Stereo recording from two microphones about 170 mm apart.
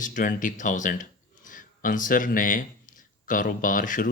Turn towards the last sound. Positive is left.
turn(degrees=50)  # may be behind; listen again after turning